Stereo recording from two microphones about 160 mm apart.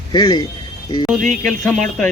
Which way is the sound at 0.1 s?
25° left (ahead or behind).